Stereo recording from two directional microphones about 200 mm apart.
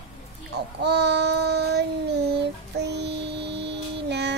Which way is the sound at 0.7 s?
55° right (ahead or behind).